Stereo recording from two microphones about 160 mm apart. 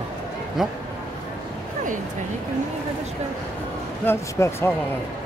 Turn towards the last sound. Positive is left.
turn(degrees=15)  # may be behind; listen again after turning